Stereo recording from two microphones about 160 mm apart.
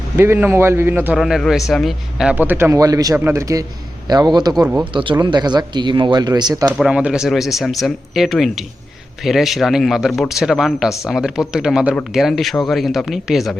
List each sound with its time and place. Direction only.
0.2 s speech: 15° right (ahead or behind)
4.6 s speech: 10° right (ahead or behind)
4.9 s speech: 30° right (ahead or behind)
6.7 s speech: 5° right (ahead or behind)